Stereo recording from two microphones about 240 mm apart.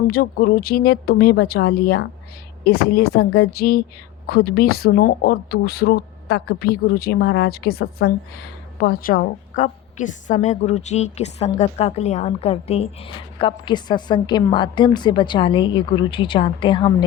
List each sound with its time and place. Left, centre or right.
0.1 s a woman's voice: left; by 17.1 s centre